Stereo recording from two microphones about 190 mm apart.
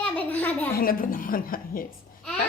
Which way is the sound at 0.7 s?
50° left (ahead or behind).